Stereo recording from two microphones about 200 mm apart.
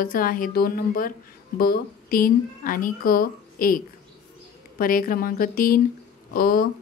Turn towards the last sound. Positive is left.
turn(degrees=45)  # may be behind; listen again after turning